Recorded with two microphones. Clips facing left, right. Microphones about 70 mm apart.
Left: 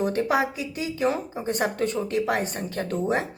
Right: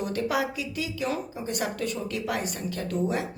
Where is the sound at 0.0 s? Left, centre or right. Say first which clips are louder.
Left 4 dB; left.